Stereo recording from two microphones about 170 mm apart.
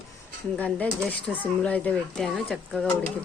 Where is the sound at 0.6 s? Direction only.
10° left (ahead or behind).